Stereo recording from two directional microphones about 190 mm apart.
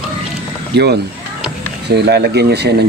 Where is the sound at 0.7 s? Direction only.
60° right (ahead or behind).